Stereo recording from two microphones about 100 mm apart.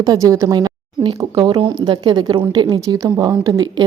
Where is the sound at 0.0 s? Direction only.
35° right (ahead or behind).